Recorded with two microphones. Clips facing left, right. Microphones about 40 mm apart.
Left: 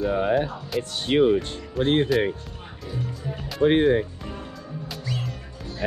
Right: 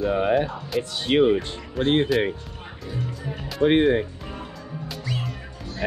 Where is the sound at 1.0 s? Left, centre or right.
Right.